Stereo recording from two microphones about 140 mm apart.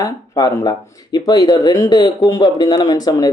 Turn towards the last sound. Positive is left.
turn(degrees=25)  # may be behind; listen again after turning